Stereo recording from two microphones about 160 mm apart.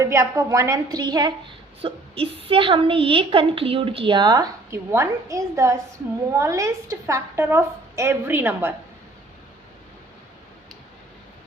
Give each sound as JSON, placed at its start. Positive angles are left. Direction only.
{"t": 0.0, "sound": "a woman's voice", "side_deg": -20}